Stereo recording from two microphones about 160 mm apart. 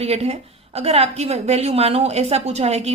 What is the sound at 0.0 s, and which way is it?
A woman's voice, 40° right (ahead or behind).